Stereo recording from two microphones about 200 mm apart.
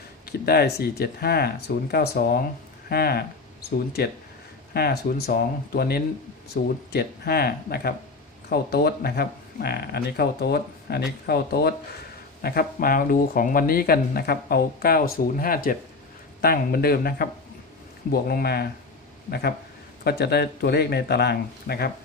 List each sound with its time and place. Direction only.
0.3 s speech: 50° left (ahead or behind)
4.7 s speech: 50° left (ahead or behind)